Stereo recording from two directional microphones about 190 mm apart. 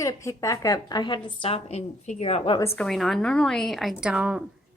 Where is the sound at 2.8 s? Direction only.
Centre (ahead or behind).